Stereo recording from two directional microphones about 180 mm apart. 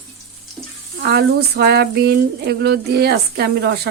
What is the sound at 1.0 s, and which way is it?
Speech, 65° right (ahead or behind).